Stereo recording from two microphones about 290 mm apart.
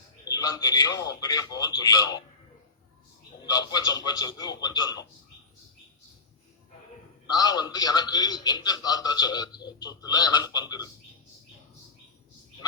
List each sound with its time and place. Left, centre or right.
0.3 s a man's voice: centre
3.4 s a man's voice: centre
7.3 s a man's voice: centre